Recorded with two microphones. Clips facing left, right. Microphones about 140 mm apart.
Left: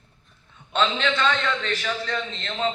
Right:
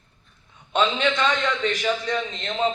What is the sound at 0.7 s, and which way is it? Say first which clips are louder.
A man's voice: right 2 dB; 15° right (ahead or behind).